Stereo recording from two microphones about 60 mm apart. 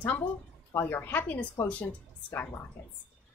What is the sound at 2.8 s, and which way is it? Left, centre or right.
Speech, left.